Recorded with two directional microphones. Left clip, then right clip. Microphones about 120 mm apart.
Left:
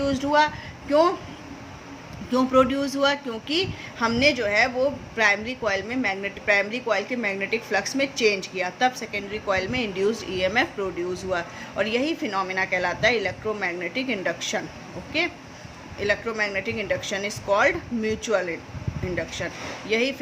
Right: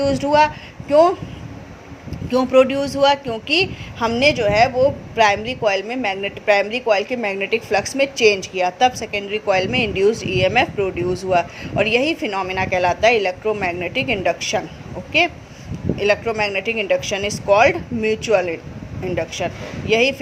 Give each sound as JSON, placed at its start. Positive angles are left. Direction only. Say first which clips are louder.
{"t": 0.0, "sound": "speech", "louder": "right 6 dB", "side_deg": -45}
{"t": 2.3, "sound": "a woman's voice", "louder": "right 6 dB", "side_deg": -45}
{"t": 16.0, "sound": "a woman's voice", "louder": "right 6 dB", "side_deg": -50}